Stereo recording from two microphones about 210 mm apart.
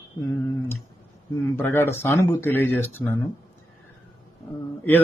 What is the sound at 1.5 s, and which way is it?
Speech, 10° left (ahead or behind).